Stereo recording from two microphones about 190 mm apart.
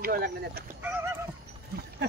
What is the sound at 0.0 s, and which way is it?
Speech, 50° right (ahead or behind).